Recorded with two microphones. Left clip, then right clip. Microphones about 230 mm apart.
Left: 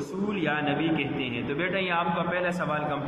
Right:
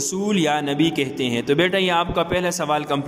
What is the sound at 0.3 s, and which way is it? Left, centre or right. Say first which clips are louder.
A man's voice: right 6 dB; right.